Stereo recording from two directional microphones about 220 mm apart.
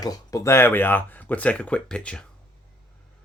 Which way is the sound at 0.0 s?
15° left (ahead or behind).